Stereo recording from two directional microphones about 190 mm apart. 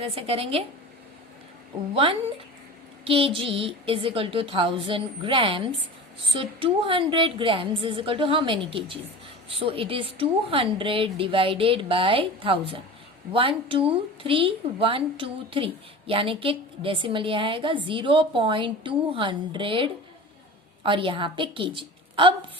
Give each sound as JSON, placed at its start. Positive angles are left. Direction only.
{"t": 0.0, "sound": "speech", "side_deg": -30}
{"t": 3.0, "sound": "a woman's voice", "side_deg": -30}